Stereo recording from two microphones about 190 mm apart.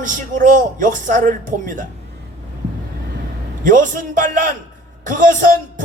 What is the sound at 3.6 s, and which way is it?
Speech, 45° right (ahead or behind).